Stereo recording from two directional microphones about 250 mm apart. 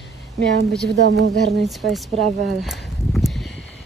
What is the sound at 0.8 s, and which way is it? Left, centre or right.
Speech, right.